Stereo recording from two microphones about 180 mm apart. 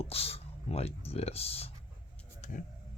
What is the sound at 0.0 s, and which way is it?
Speech, 35° left (ahead or behind).